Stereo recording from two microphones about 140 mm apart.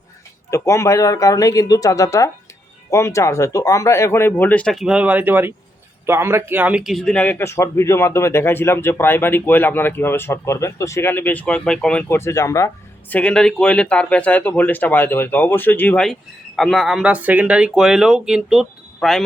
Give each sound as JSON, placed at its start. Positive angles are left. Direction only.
{"t": 0.5, "sound": "speech", "side_deg": 20}
{"t": 13.1, "sound": "speech", "side_deg": 5}
{"t": 16.6, "sound": "speech", "side_deg": 0}